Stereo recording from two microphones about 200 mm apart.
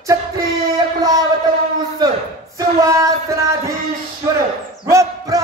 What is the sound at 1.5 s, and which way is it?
Speech, 45° right (ahead or behind).